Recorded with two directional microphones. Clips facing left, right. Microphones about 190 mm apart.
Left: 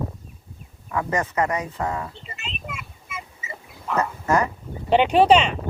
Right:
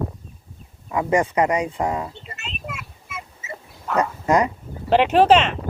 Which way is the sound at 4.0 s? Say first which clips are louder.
Right 3 dB; 15° right (ahead or behind).